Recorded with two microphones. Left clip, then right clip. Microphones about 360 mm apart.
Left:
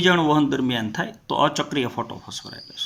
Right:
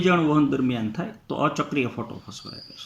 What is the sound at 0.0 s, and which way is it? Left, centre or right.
Speech, left.